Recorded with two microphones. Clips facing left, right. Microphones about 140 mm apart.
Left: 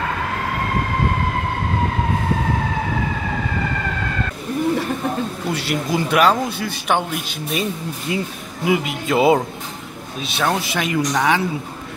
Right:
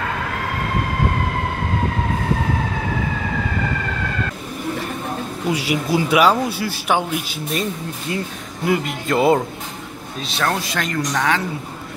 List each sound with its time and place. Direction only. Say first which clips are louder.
5.5 s speech: right 4 dB; 10° right (ahead or behind)
8.1 s speech: left 2 dB; 15° left (ahead or behind)
8.6 s speech: left 1 dB; 5° left (ahead or behind)